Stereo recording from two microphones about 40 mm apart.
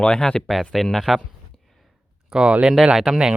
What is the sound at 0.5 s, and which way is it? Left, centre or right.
Speech, centre.